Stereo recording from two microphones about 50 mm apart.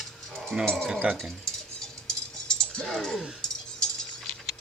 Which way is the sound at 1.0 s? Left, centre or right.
Right.